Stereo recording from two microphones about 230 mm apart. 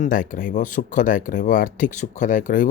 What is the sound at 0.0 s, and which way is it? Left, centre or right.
A man's voice, left.